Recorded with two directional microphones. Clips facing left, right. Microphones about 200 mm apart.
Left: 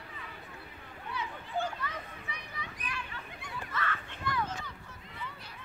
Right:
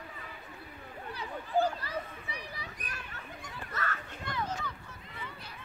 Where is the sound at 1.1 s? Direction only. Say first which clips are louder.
Right 5 dB; 35° right (ahead or behind).